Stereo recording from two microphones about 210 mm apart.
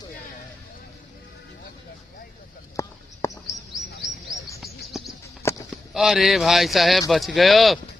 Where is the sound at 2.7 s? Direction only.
15° left (ahead or behind).